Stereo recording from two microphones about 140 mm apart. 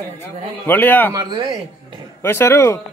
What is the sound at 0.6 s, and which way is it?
Speech, 15° left (ahead or behind).